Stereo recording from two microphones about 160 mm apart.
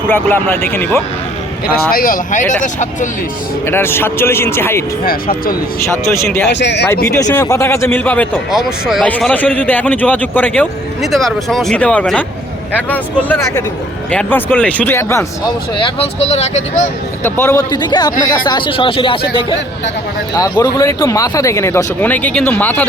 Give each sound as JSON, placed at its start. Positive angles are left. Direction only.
{"t": 0.1, "sound": "speech", "side_deg": 15}
{"t": 1.9, "sound": "speech", "side_deg": 65}
{"t": 3.7, "sound": "speech", "side_deg": 15}
{"t": 6.1, "sound": "speech", "side_deg": 15}
{"t": 6.5, "sound": "speech", "side_deg": 90}
{"t": 6.8, "sound": "speech", "side_deg": 15}
{"t": 8.4, "sound": "speech", "side_deg": -5}
{"t": 9.0, "sound": "speech", "side_deg": 10}
{"t": 15.8, "sound": "speech", "side_deg": 40}
{"t": 17.2, "sound": "a man's voice", "side_deg": 15}
{"t": 20.3, "sound": "speech", "side_deg": 20}